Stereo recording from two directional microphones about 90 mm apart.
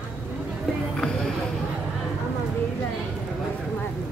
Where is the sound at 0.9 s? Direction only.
10° left (ahead or behind).